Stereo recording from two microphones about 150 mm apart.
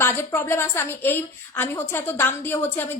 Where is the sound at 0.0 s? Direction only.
15° left (ahead or behind).